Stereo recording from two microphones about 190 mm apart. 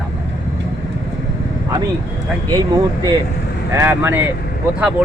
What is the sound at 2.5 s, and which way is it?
Speech, 20° right (ahead or behind).